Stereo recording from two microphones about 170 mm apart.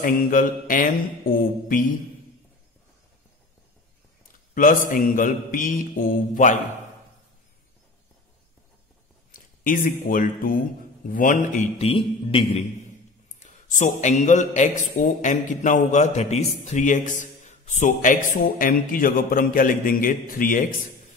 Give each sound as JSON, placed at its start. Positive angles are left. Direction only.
{"t": 0.0, "sound": "a man's voice", "side_deg": 55}
{"t": 4.6, "sound": "a man's voice", "side_deg": 50}
{"t": 9.3, "sound": "a man's voice", "side_deg": 55}
{"t": 11.9, "sound": "music", "side_deg": 30}
{"t": 13.4, "sound": "a man's voice", "side_deg": 45}